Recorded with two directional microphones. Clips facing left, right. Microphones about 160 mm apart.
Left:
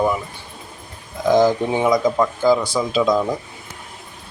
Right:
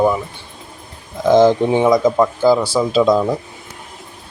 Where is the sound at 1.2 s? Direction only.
25° right (ahead or behind).